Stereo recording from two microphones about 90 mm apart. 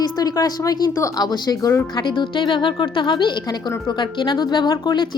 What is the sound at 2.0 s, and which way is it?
A woman's voice, 60° left (ahead or behind).